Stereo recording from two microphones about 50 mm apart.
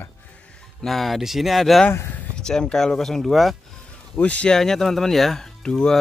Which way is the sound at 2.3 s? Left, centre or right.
Centre.